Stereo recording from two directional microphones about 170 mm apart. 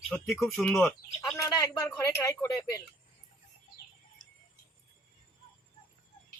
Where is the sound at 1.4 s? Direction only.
20° left (ahead or behind).